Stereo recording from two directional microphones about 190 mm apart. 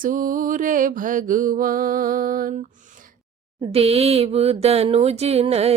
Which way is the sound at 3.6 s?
30° right (ahead or behind).